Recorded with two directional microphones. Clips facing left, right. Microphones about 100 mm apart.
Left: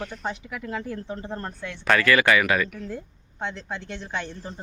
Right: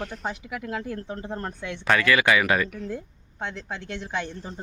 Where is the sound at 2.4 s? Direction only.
30° right (ahead or behind).